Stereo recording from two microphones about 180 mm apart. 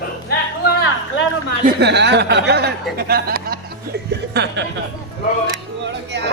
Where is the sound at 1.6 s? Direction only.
70° right (ahead or behind).